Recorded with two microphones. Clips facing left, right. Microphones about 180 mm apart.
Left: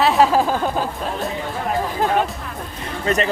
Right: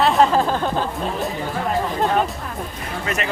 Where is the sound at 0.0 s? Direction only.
5° left (ahead or behind).